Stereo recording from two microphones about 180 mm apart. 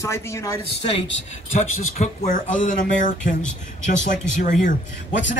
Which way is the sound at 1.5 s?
40° left (ahead or behind).